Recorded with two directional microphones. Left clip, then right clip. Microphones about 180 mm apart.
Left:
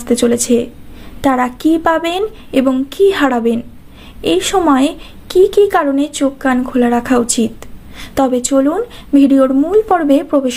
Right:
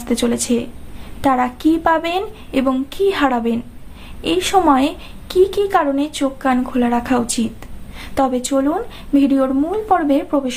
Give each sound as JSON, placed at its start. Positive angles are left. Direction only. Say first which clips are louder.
{"t": 0.0, "sound": "a woman's voice", "louder": "left 6 dB", "side_deg": 20}